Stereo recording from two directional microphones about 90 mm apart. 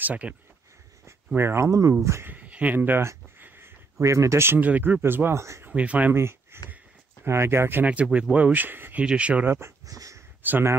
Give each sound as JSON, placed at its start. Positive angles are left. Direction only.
{"t": 0.0, "sound": "speech", "side_deg": -15}
{"t": 1.0, "sound": "a sound", "side_deg": -25}
{"t": 1.7, "sound": "speech", "side_deg": -40}
{"t": 2.3, "sound": "speech", "side_deg": -15}
{"t": 5.7, "sound": "speech", "side_deg": -15}
{"t": 6.1, "sound": "speech", "side_deg": -30}
{"t": 9.5, "sound": "speech", "side_deg": -30}
{"t": 9.9, "sound": "a sound", "side_deg": -40}
{"t": 10.4, "sound": "speech", "side_deg": -20}